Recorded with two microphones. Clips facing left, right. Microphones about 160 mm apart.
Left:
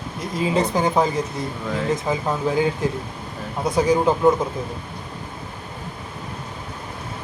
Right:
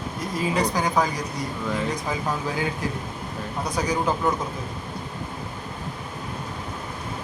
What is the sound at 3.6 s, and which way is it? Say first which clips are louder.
Speech: left 8 dB; 25° left (ahead or behind).